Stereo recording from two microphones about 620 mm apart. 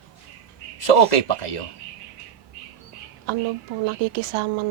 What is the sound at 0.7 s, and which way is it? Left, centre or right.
Speech, left.